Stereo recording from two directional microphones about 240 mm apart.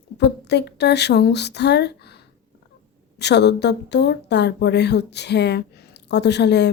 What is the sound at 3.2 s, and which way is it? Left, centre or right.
Speech, left.